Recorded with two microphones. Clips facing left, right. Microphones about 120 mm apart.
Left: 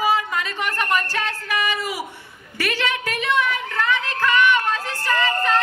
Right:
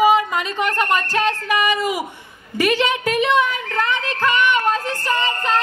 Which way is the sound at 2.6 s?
20° right (ahead or behind).